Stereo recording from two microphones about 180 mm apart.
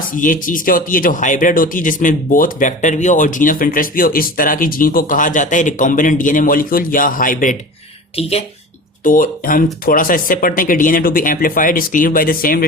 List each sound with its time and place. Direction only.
0.1 s speech: 45° left (ahead or behind)
8.1 s speech: 35° left (ahead or behind)
9.0 s speech: 50° left (ahead or behind)